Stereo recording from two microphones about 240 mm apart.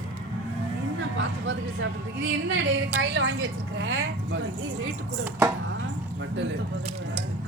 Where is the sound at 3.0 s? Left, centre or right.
Right.